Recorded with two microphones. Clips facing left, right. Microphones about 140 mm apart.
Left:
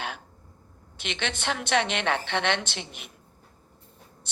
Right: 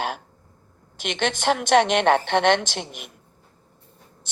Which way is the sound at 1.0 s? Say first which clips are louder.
Right 8 dB; 50° right (ahead or behind).